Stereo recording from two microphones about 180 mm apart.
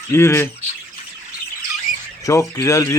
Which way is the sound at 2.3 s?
20° left (ahead or behind).